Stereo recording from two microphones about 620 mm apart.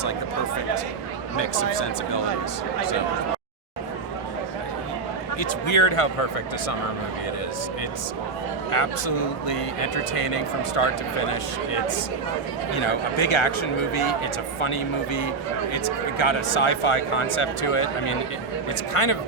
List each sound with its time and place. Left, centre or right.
1.4 s speech: left
5.4 s speech: left
8.7 s speech: left